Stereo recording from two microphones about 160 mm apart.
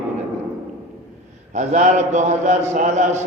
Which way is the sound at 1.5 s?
50° right (ahead or behind).